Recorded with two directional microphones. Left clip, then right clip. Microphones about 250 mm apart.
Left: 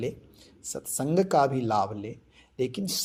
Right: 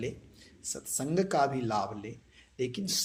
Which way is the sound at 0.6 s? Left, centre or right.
Left.